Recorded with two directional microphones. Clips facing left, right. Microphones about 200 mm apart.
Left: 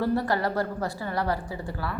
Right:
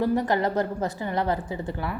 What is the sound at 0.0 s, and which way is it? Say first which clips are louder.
A woman's voice: right 2 dB; 15° right (ahead or behind).